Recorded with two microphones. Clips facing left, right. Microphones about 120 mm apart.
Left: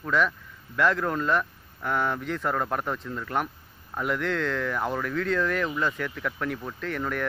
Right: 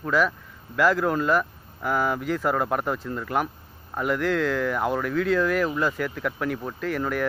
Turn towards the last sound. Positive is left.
turn(degrees=-5)  # may be behind; listen again after turning